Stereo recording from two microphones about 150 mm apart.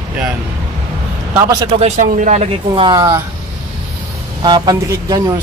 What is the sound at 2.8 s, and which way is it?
Speech, 30° right (ahead or behind).